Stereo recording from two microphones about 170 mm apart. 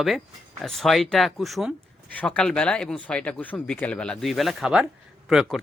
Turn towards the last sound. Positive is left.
turn(degrees=-5)  # may be behind; listen again after turning